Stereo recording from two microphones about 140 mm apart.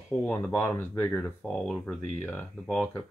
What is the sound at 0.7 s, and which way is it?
Speech, 20° left (ahead or behind).